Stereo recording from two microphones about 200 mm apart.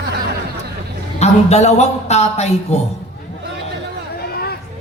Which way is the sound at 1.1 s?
35° left (ahead or behind).